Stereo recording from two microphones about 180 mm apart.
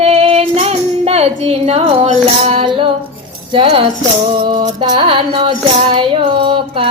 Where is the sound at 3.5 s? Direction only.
30° right (ahead or behind).